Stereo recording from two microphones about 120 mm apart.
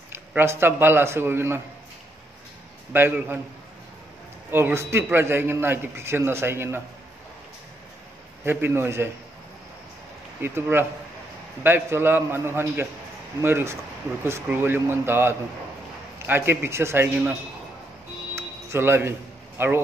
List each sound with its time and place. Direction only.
0.3 s a man's voice: 20° right (ahead or behind)
2.9 s a man's voice: 15° right (ahead or behind)
4.5 s a man's voice: 20° right (ahead or behind)
8.5 s a man's voice: 20° right (ahead or behind)
10.4 s a man's voice: 20° right (ahead or behind)
18.3 s music: 20° right (ahead or behind)
19.6 s a man's voice: 20° right (ahead or behind)